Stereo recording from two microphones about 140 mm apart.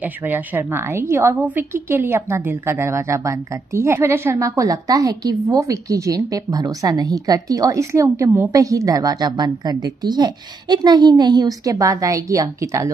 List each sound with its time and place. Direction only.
0.3 s a woman's voice: 15° right (ahead or behind)